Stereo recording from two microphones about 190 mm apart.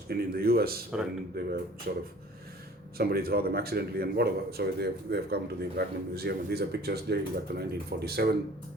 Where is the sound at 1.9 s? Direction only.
50° right (ahead or behind).